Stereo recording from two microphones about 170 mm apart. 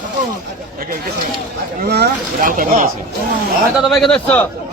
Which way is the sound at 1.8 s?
70° right (ahead or behind).